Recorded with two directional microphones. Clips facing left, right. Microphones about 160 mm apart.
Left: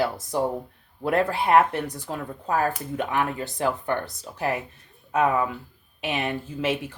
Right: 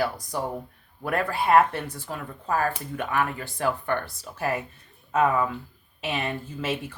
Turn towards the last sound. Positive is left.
turn(degrees=15)  # may be behind; listen again after turning